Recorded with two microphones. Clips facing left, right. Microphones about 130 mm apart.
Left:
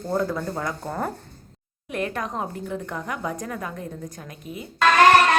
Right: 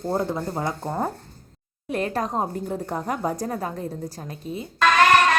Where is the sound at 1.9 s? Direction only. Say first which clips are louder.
Right 3 dB; 35° right (ahead or behind).